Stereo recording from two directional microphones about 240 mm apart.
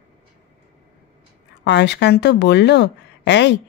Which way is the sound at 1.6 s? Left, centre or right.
Left.